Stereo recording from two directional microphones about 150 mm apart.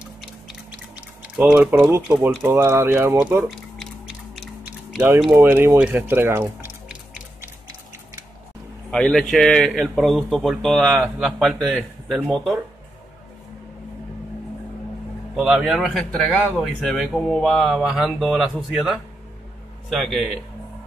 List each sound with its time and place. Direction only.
0.0 s a sound: 5° right (ahead or behind)
1.9 s speech: 15° right (ahead or behind)
3.4 s a sound: centre (ahead or behind)
5.3 s music: 15° right (ahead or behind)
8.9 s speech: 5° left (ahead or behind)
15.3 s speech: 5° right (ahead or behind)